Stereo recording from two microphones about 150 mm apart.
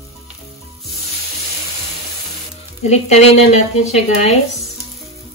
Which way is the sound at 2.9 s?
45° left (ahead or behind).